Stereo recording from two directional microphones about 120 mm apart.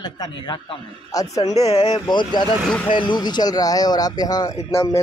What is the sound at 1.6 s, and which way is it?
Speech, 50° left (ahead or behind).